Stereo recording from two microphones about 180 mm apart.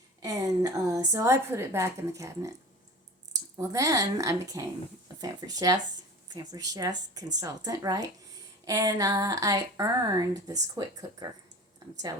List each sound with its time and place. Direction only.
0.2 s a woman's voice: 20° right (ahead or behind)